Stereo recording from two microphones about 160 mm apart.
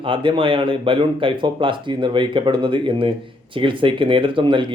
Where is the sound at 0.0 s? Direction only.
30° right (ahead or behind).